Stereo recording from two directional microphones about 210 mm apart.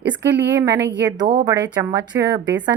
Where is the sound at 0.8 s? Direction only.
55° right (ahead or behind).